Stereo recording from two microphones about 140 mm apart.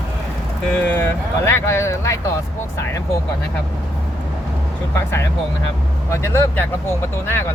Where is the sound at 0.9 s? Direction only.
15° left (ahead or behind).